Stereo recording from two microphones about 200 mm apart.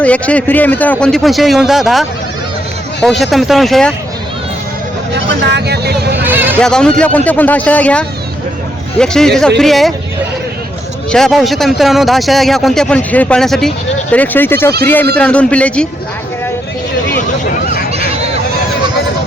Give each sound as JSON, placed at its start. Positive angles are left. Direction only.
{"t": 0.0, "sound": "a man's voice", "side_deg": 5}
{"t": 5.1, "sound": "speech", "side_deg": -60}
{"t": 6.2, "sound": "a sound", "side_deg": -10}
{"t": 6.6, "sound": "a man's voice", "side_deg": 5}
{"t": 11.1, "sound": "a man's voice", "side_deg": 0}
{"t": 17.9, "sound": "a sound", "side_deg": -30}